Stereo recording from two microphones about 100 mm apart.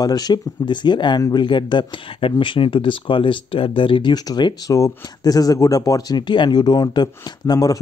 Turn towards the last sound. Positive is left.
turn(degrees=40)  # may be behind; listen again after turning